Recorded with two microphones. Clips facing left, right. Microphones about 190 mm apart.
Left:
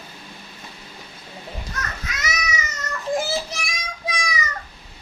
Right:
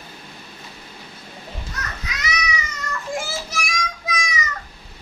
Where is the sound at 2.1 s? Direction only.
45° left (ahead or behind).